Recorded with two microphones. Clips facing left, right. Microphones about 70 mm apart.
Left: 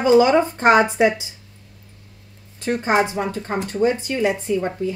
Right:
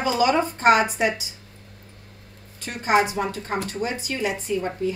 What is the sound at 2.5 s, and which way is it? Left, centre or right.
A woman's voice, left.